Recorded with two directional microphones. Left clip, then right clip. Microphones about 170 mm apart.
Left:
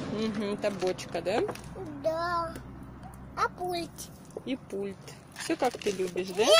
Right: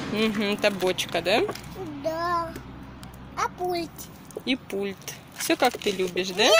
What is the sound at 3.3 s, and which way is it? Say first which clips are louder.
Speech: right 3 dB; 30° left (ahead or behind).